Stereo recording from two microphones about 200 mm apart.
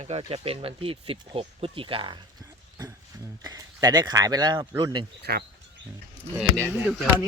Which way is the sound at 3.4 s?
20° right (ahead or behind).